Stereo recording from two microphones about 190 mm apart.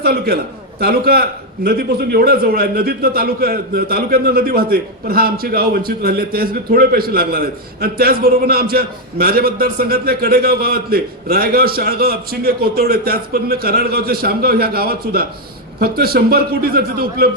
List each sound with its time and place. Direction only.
0.0 s a man's voice: 55° right (ahead or behind)